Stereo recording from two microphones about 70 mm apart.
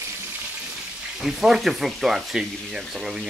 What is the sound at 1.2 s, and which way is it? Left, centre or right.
Speech, centre.